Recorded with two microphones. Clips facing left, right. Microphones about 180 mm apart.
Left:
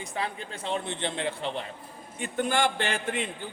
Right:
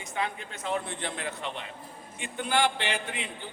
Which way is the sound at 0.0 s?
35° left (ahead or behind).